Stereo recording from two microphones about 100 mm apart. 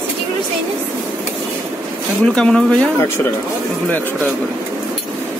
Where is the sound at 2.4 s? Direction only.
10° left (ahead or behind).